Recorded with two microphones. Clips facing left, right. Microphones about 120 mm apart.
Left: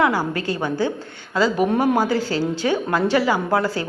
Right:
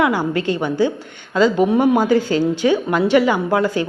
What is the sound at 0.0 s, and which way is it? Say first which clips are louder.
A woman's voice: right 2 dB; 20° right (ahead or behind).